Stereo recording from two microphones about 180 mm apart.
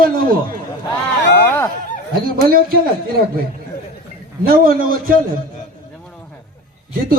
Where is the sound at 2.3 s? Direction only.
55° right (ahead or behind).